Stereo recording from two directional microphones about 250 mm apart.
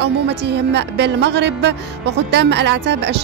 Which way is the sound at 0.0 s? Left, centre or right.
Right.